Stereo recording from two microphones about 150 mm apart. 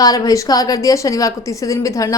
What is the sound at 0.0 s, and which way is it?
A woman's voice, 25° left (ahead or behind).